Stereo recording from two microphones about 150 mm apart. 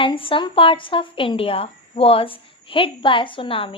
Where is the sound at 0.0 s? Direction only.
35° left (ahead or behind).